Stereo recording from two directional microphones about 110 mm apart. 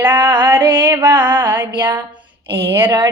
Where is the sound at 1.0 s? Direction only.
45° right (ahead or behind).